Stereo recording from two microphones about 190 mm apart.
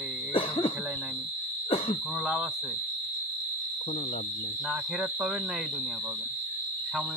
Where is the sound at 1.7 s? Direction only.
30° left (ahead or behind).